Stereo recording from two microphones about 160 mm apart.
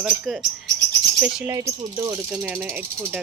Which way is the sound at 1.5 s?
20° right (ahead or behind).